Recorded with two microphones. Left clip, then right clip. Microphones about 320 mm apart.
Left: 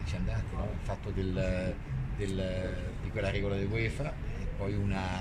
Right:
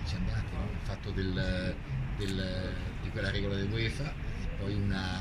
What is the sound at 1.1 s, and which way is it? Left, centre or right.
Speech, centre.